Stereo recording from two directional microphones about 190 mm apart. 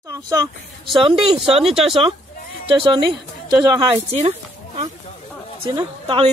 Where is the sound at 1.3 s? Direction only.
25° right (ahead or behind).